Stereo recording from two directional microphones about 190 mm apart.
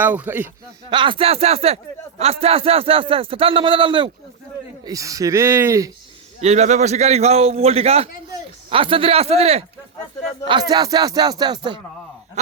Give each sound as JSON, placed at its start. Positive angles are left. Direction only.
{"t": 0.0, "sound": "speech", "side_deg": -10}
{"t": 0.9, "sound": "speech", "side_deg": -25}
{"t": 6.4, "sound": "a man's voice", "side_deg": -35}
{"t": 10.4, "sound": "speech", "side_deg": -25}